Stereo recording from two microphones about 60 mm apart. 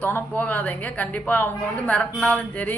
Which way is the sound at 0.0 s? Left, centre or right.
Left.